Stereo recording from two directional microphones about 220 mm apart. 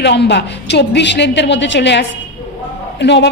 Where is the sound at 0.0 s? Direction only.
50° left (ahead or behind).